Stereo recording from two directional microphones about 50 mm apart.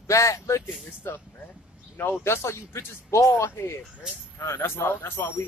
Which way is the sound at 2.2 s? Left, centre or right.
Left.